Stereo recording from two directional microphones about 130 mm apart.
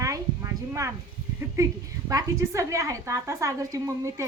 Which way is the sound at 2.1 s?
25° right (ahead or behind).